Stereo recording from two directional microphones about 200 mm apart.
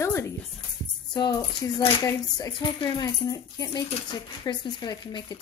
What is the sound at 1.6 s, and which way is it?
Speech, 15° left (ahead or behind).